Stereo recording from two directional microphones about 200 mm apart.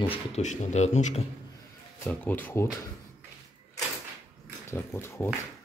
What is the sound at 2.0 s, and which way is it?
Speech, 10° left (ahead or behind).